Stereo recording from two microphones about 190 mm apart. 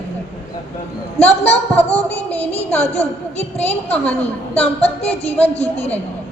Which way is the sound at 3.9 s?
5° left (ahead or behind).